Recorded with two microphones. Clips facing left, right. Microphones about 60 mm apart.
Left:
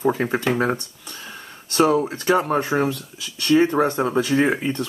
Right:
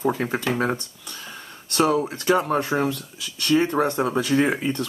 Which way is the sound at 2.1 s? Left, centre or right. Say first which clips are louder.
Left 1 dB; centre.